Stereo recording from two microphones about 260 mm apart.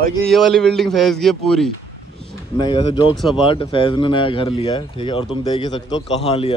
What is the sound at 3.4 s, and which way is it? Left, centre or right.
Speech, centre.